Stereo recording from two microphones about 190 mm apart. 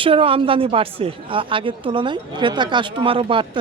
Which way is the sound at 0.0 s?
30° right (ahead or behind).